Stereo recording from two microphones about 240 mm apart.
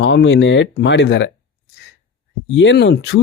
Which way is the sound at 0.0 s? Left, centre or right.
Left.